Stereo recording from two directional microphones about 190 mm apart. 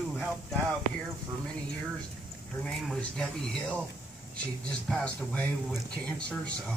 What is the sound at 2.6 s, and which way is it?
Speech, centre (ahead or behind).